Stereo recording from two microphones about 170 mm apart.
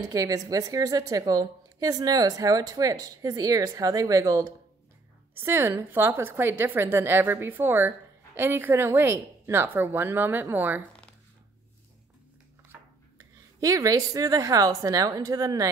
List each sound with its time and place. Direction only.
0.0 s a woman's voice: 20° right (ahead or behind)
13.6 s a woman's voice: 20° right (ahead or behind)